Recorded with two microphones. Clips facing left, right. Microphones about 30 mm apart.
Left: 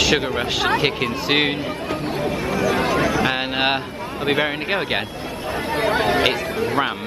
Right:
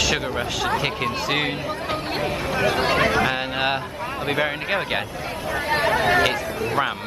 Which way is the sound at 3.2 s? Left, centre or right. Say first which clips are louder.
Left 3 dB; left.